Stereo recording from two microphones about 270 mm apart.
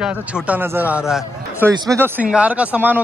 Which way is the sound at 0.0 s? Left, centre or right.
Centre.